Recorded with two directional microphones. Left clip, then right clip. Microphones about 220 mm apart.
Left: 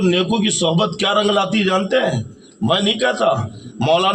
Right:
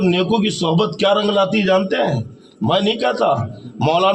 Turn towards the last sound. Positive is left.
turn(degrees=35)  # may be behind; listen again after turning